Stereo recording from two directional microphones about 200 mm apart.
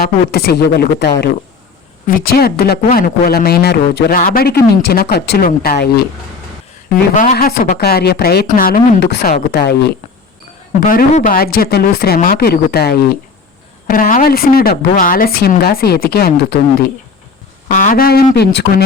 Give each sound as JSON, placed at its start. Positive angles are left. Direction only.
{"t": 0.0, "sound": "a man's voice", "side_deg": 50}
{"t": 6.9, "sound": "a man's voice", "side_deg": 40}
{"t": 10.8, "sound": "a man's voice", "side_deg": 40}
{"t": 17.7, "sound": "a man's voice", "side_deg": 40}